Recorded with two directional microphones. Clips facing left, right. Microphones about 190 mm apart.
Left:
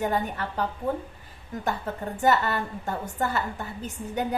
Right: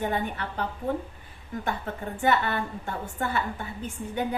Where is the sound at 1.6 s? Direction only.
40° left (ahead or behind).